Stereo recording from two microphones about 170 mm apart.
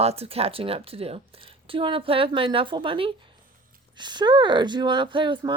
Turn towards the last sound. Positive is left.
turn(degrees=-30)  # may be behind; listen again after turning